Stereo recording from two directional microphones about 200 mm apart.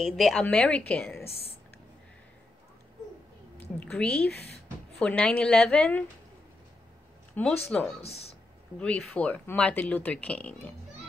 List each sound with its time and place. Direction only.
0.0 s speech: centre (ahead or behind)
3.5 s a sound: 5° left (ahead or behind)
4.9 s a woman's voice: 5° left (ahead or behind)
7.4 s speech: 10° left (ahead or behind)
8.0 s speech: 30° left (ahead or behind)
8.7 s speech: 5° left (ahead or behind)